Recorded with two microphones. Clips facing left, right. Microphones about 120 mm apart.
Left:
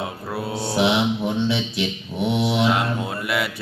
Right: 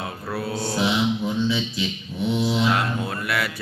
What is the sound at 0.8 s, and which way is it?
Mantra, 70° left (ahead or behind).